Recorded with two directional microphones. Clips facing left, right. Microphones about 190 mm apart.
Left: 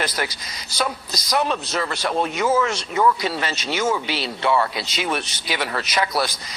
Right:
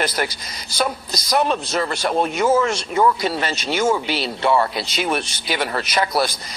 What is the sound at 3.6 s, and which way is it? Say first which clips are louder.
Speech: right 4 dB; 50° right (ahead or behind).